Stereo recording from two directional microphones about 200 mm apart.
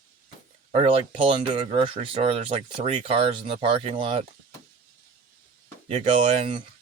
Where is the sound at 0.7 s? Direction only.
30° right (ahead or behind).